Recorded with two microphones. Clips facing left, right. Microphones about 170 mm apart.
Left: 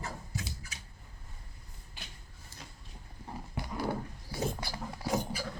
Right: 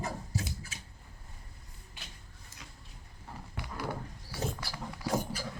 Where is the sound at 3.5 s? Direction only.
30° left (ahead or behind).